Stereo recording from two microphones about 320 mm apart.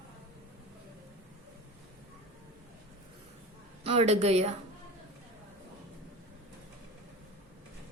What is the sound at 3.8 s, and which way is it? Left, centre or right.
Speech, centre.